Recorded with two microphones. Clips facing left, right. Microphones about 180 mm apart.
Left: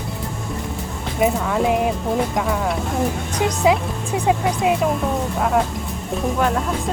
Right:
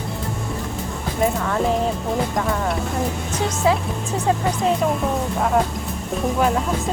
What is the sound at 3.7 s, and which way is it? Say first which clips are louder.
Speech: left 1 dB; 15° left (ahead or behind).